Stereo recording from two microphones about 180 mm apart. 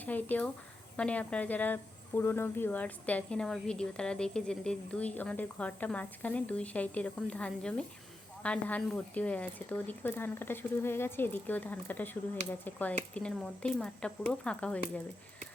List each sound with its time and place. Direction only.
0.0 s speech: 10° left (ahead or behind)